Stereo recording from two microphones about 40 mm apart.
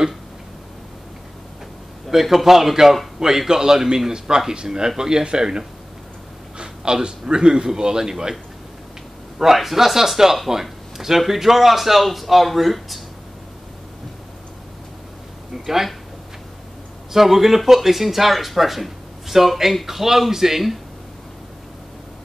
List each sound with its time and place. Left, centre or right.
2.0 s a man's voice: centre
6.6 s a man's voice: right
9.4 s speech: centre
15.5 s speech: centre
17.1 s speech: centre